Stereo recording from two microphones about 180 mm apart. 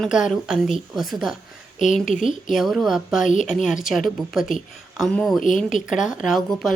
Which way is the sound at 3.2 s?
45° left (ahead or behind).